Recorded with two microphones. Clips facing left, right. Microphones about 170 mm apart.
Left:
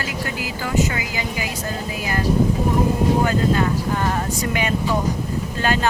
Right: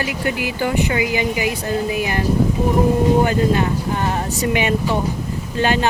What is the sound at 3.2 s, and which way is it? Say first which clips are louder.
Speech: right 2 dB; 20° right (ahead or behind).